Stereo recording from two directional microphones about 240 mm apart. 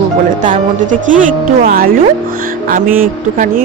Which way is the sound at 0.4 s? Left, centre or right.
Right.